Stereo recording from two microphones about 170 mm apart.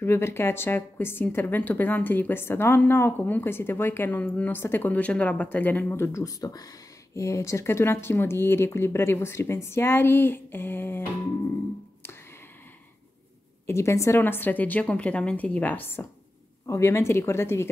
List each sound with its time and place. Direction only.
0.0 s a woman's voice: 15° left (ahead or behind)
13.7 s a woman's voice: 15° left (ahead or behind)